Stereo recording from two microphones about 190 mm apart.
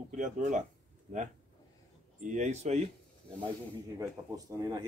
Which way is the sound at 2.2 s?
40° right (ahead or behind).